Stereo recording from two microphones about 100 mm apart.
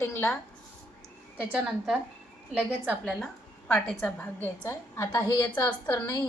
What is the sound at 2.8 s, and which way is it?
Speech, 15° right (ahead or behind).